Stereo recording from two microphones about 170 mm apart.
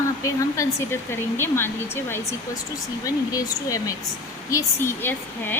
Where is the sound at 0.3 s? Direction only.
15° left (ahead or behind).